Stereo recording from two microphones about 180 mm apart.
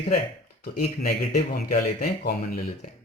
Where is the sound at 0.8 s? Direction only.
55° left (ahead or behind).